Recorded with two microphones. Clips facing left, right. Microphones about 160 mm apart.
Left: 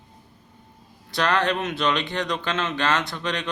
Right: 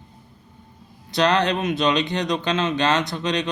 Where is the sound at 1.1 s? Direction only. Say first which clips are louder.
Right 3 dB; 20° right (ahead or behind).